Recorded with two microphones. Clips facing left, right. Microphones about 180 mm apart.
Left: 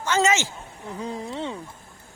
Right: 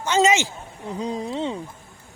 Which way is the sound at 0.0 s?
20° right (ahead or behind).